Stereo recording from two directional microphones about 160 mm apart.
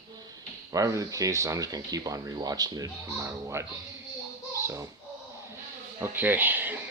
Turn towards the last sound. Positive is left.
turn(degrees=-10)  # may be behind; listen again after turning